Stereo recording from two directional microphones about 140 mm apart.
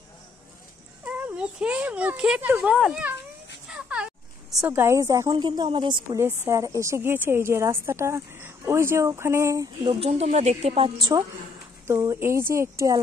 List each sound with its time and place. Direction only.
1.0 s speech: 10° right (ahead or behind)
3.6 s a sound: 5° right (ahead or behind)
4.6 s a woman's voice: 15° right (ahead or behind)
5.3 s speech: 30° right (ahead or behind)
6.0 s a woman's voice: 20° right (ahead or behind)
9.8 s speech: 45° right (ahead or behind)
11.0 s a woman's voice: 30° right (ahead or behind)
11.9 s a woman's voice: 20° right (ahead or behind)